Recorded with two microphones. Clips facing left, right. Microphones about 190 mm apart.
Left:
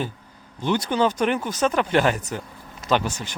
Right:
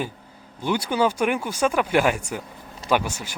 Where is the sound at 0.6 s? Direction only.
10° right (ahead or behind).